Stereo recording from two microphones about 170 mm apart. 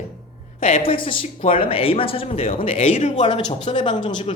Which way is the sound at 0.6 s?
35° left (ahead or behind).